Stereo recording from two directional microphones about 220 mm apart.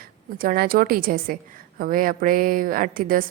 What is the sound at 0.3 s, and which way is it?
Speech, 40° right (ahead or behind).